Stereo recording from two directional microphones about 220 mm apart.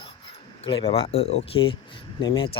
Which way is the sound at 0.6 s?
25° left (ahead or behind).